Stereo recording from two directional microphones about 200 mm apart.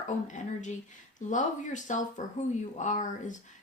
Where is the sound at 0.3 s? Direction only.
35° left (ahead or behind).